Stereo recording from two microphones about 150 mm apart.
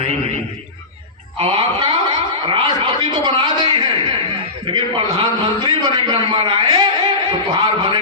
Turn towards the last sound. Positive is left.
turn(degrees=-30)  # may be behind; listen again after turning